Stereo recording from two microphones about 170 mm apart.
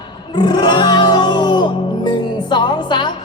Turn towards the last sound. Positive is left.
turn(degrees=25)  # may be behind; listen again after turning